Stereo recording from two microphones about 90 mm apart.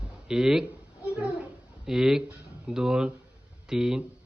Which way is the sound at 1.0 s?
15° right (ahead or behind).